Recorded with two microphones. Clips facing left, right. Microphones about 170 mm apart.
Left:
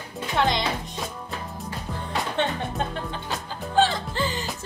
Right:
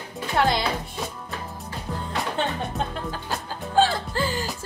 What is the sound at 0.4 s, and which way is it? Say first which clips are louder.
Music: right 1 dB; 5° right (ahead or behind).